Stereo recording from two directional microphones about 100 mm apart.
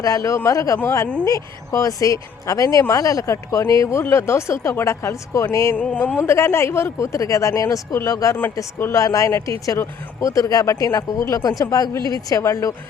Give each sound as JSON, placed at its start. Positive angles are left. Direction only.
{"t": 0.0, "sound": "speech", "side_deg": 35}
{"t": 5.7, "sound": "speech", "side_deg": 15}
{"t": 6.1, "sound": "speech", "side_deg": 25}